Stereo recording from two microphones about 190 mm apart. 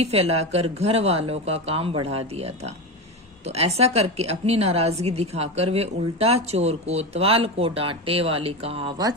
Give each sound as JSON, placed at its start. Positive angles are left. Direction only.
{"t": 0.0, "sound": "a woman's voice", "side_deg": -35}